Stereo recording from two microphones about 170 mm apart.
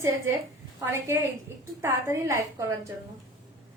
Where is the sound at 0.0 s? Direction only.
15° right (ahead or behind).